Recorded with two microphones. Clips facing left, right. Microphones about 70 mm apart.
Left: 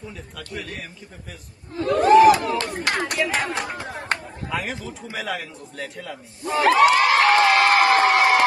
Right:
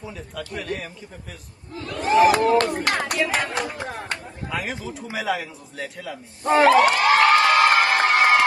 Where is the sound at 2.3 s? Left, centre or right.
Right.